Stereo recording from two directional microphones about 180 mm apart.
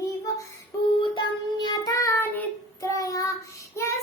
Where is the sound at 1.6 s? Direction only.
20° left (ahead or behind).